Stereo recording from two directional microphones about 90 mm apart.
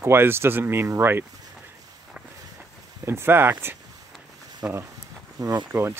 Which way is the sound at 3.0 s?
25° right (ahead or behind).